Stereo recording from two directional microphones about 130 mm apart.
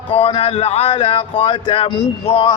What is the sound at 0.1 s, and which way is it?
Speech, 45° left (ahead or behind).